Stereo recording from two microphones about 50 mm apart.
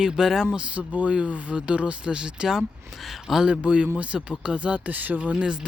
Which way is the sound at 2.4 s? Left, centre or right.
Centre.